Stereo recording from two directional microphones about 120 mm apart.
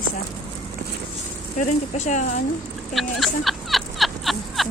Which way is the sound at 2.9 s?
Centre (ahead or behind).